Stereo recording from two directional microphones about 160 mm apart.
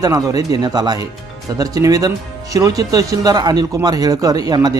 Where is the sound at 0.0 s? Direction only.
20° right (ahead or behind).